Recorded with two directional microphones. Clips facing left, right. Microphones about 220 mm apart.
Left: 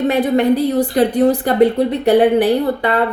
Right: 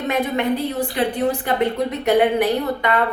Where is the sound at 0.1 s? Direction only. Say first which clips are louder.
Left 4 dB; 35° left (ahead or behind).